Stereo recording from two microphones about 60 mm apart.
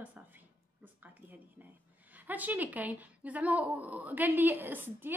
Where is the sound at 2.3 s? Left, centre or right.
Right.